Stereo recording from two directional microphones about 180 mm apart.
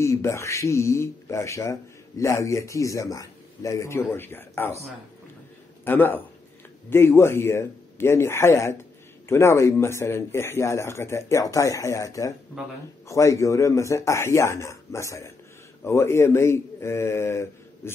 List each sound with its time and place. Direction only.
0.0 s speech: 15° left (ahead or behind)
5.9 s speech: 10° left (ahead or behind)